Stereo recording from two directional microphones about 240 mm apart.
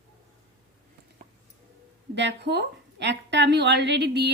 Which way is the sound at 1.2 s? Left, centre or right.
Right.